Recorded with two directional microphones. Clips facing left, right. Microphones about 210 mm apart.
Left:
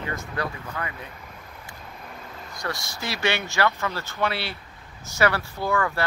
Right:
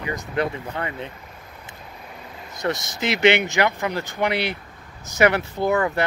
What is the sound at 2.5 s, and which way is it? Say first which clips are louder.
Speech: right 7 dB; 20° right (ahead or behind).